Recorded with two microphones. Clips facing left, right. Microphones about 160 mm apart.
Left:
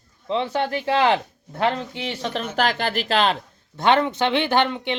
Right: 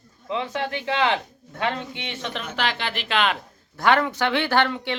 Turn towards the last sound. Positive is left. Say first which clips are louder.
# left 1 dB
turn(degrees=20)  # may be behind; listen again after turning